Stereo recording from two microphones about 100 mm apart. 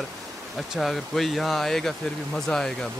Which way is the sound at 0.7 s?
Centre (ahead or behind).